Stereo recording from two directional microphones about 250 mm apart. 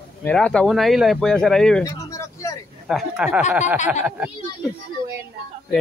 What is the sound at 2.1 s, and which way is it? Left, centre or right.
Vehicle, centre.